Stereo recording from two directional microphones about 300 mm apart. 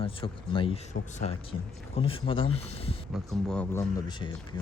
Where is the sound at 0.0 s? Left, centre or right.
Centre.